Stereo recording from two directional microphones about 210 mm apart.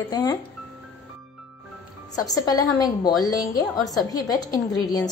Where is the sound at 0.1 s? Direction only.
20° left (ahead or behind).